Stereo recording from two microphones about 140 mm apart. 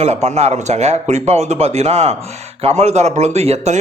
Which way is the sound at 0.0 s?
50° right (ahead or behind).